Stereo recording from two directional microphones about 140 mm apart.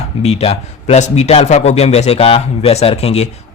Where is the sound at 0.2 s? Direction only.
50° left (ahead or behind).